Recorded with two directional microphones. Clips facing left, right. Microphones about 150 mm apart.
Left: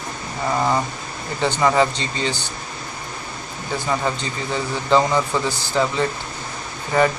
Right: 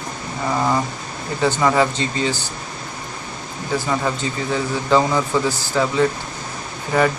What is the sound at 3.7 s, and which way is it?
Speech, 5° right (ahead or behind).